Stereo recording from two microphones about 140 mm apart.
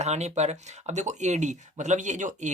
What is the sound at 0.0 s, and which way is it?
Speech, 50° right (ahead or behind).